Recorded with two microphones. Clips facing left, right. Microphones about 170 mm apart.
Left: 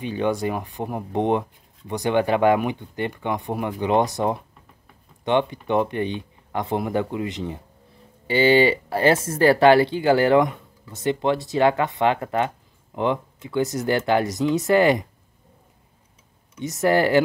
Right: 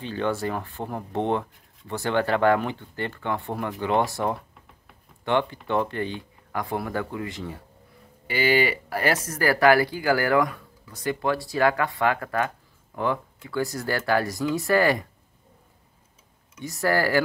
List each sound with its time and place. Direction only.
0.0 s speech: 15° left (ahead or behind)
16.6 s speech: 20° left (ahead or behind)